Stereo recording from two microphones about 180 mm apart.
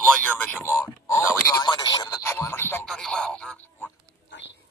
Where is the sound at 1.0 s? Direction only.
15° left (ahead or behind).